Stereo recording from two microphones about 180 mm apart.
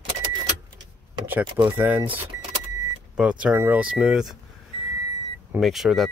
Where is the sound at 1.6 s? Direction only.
10° right (ahead or behind).